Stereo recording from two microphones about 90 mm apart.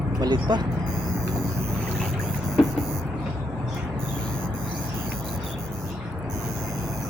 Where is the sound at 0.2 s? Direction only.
55° right (ahead or behind).